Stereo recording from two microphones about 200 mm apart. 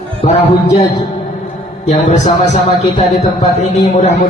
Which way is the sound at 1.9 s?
35° left (ahead or behind).